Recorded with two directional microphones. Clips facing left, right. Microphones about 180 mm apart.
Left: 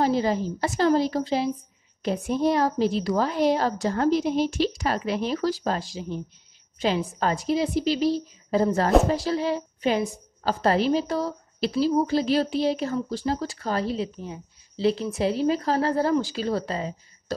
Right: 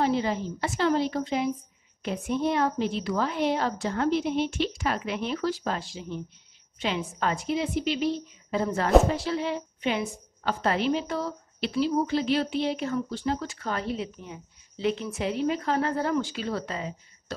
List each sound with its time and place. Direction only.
0.0 s a woman's voice: 40° left (ahead or behind)